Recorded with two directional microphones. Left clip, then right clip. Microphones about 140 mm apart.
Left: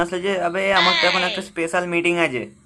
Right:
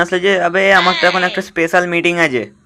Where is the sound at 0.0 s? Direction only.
25° right (ahead or behind).